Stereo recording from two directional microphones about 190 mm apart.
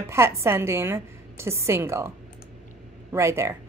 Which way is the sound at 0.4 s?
15° right (ahead or behind).